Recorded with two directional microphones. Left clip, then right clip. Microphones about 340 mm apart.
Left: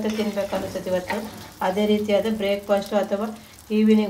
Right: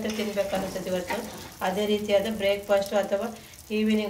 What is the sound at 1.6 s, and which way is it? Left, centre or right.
Speech, left.